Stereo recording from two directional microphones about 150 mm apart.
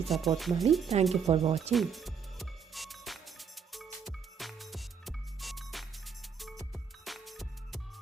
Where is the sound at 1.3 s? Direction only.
45° right (ahead or behind).